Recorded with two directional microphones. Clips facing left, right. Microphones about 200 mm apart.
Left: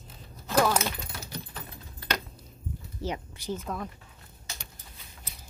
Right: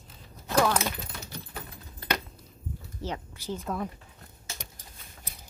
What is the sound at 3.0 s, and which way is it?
Speech, 15° left (ahead or behind).